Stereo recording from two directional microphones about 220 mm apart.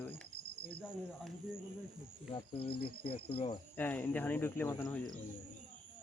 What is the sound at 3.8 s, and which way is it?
Speech, 10° left (ahead or behind).